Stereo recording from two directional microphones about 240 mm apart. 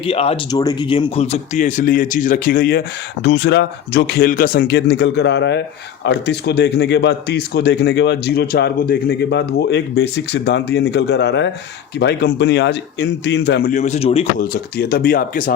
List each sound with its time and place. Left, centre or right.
0.0 s a man's voice: left